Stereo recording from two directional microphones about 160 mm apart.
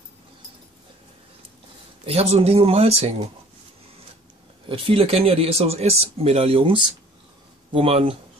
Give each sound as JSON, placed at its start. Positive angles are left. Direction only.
{"t": 2.0, "sound": "speech", "side_deg": -40}
{"t": 4.6, "sound": "speech", "side_deg": -35}